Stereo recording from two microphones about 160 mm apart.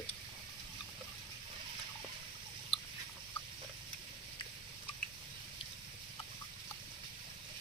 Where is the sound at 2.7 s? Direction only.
35° left (ahead or behind).